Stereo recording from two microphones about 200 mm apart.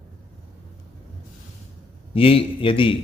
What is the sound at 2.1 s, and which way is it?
Speech, 30° left (ahead or behind).